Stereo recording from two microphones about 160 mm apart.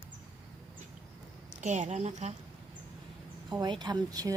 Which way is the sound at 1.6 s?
50° right (ahead or behind).